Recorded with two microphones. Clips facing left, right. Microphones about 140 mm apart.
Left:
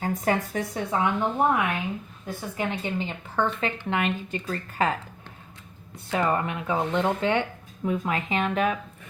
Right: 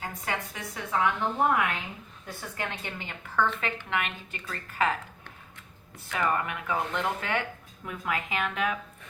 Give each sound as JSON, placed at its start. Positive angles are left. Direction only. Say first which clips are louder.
{"t": 0.0, "sound": "a woman's voice", "louder": "left 9 dB", "side_deg": 40}
{"t": 0.8, "sound": "speech", "louder": "left 2 dB", "side_deg": 25}
{"t": 3.6, "sound": "speech", "louder": "left 5 dB", "side_deg": 35}
{"t": 6.1, "sound": "speech", "louder": "left 4 dB", "side_deg": 30}